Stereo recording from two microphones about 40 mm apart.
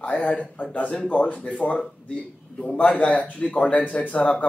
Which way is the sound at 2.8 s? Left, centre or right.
Left.